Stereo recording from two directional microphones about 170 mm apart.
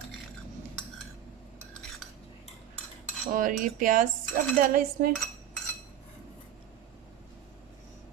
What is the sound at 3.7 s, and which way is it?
Speech, 50° right (ahead or behind).